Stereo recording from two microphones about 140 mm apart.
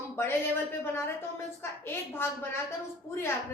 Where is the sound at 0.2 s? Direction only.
15° left (ahead or behind).